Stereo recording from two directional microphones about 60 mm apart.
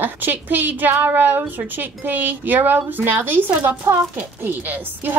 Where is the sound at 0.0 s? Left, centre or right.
Right.